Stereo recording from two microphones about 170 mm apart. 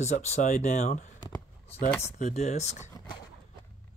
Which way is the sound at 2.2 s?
40° left (ahead or behind).